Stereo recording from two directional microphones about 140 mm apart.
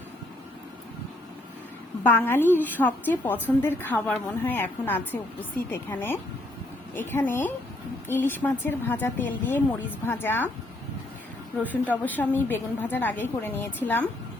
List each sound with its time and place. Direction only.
2.0 s a woman's voice: 15° left (ahead or behind)
11.6 s a woman's voice: 10° left (ahead or behind)